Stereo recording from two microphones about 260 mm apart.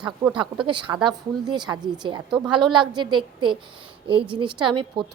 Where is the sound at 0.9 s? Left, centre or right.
Centre.